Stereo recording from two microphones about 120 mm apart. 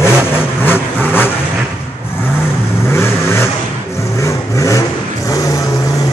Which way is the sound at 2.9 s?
20° left (ahead or behind).